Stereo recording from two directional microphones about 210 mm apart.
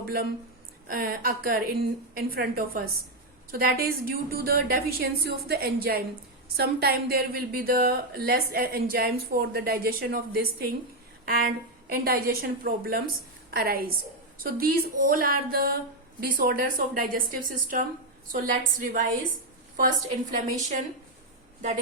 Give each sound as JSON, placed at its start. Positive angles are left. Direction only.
{"t": 0.0, "sound": "a woman's voice", "side_deg": -45}
{"t": 19.7, "sound": "a woman's voice", "side_deg": -40}